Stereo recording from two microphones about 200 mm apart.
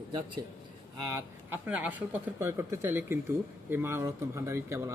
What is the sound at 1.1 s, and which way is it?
Speech, 10° right (ahead or behind).